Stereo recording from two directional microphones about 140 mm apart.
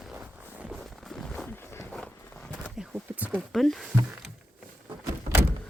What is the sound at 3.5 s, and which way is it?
Speech, centre (ahead or behind).